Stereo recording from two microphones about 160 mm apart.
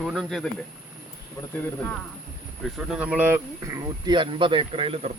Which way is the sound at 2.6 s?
5° right (ahead or behind).